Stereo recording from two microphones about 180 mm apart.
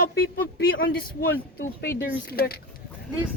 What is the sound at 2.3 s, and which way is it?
Speech, 60° left (ahead or behind).